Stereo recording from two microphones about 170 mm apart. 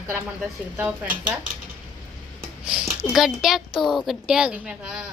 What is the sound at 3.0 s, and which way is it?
A woman's voice, centre (ahead or behind).